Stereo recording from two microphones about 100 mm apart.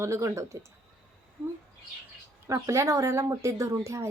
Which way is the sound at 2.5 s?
30° right (ahead or behind).